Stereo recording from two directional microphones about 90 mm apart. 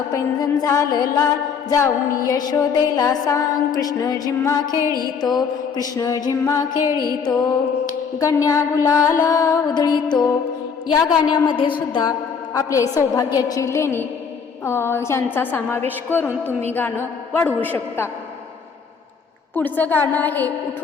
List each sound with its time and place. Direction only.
0.1 s music: 40° left (ahead or behind)
11.1 s a sound: 60° left (ahead or behind)
12.5 s music: 40° left (ahead or behind)
13.7 s music: 30° left (ahead or behind)
14.6 s a woman's voice: 30° left (ahead or behind)
19.5 s a woman's voice: 20° left (ahead or behind)